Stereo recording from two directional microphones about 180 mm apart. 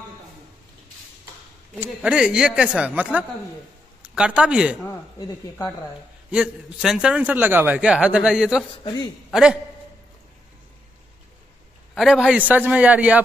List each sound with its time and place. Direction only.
1.8 s speech: 5° right (ahead or behind)
6.3 s a man's voice: 5° right (ahead or behind)
8.8 s a man's voice: 20° left (ahead or behind)
9.3 s a man's voice: 5° right (ahead or behind)
11.9 s speech: centre (ahead or behind)